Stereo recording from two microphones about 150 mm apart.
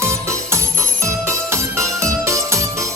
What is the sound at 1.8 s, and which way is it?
Music, 20° right (ahead or behind).